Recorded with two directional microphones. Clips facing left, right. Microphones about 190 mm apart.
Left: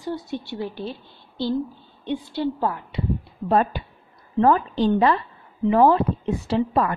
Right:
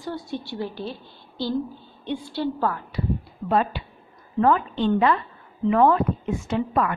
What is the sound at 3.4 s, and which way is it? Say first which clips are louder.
A woman's voice: left 2 dB; 45° left (ahead or behind).